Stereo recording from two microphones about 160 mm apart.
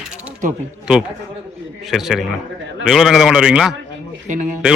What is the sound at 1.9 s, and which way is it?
A man's voice, centre (ahead or behind).